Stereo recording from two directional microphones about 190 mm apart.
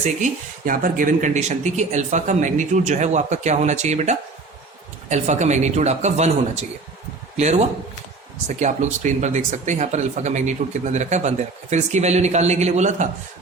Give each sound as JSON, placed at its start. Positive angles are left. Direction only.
{"t": 0.0, "sound": "speech", "side_deg": -40}